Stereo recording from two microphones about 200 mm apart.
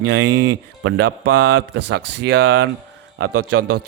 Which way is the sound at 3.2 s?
90° right.